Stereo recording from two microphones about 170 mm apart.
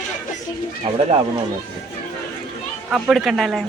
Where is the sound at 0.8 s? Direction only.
35° right (ahead or behind).